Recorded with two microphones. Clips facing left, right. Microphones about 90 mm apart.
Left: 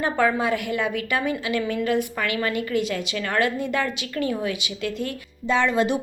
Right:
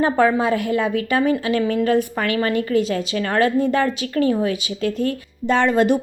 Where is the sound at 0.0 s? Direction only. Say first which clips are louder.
Right 5 dB; 30° right (ahead or behind).